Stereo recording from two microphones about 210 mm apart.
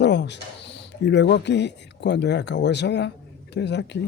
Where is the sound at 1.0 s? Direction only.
55° left (ahead or behind).